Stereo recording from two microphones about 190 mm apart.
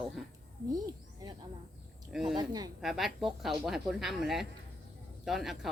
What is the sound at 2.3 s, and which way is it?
Speech, 20° right (ahead or behind).